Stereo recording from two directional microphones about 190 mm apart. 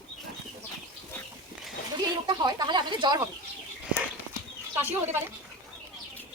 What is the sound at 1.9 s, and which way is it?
Speech, 20° right (ahead or behind).